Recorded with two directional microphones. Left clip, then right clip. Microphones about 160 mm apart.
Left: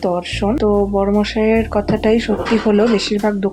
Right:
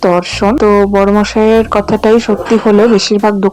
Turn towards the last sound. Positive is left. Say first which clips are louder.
# right 8 dB
turn(degrees=-35)  # may be behind; listen again after turning